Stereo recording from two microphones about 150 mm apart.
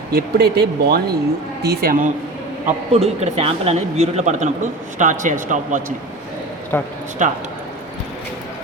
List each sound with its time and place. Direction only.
0.1 s speech: 90° right
2.9 s speech: 45° right (ahead or behind)
6.7 s speech: 10° left (ahead or behind)
7.2 s speech: 55° right (ahead or behind)